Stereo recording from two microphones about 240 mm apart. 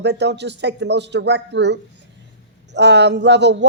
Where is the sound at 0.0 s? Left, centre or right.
Right.